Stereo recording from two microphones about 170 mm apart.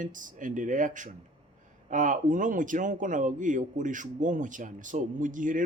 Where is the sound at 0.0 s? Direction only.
50° right (ahead or behind).